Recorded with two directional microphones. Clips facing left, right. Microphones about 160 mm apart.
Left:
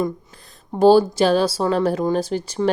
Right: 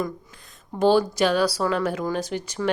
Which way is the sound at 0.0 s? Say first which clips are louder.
Left 5 dB; 35° left (ahead or behind).